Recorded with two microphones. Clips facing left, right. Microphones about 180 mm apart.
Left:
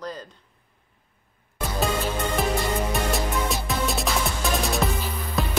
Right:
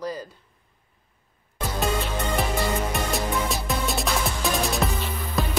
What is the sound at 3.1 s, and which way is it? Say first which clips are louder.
Music: even; centre (ahead or behind).